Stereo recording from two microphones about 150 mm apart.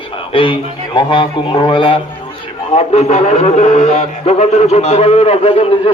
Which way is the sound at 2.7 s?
45° left (ahead or behind).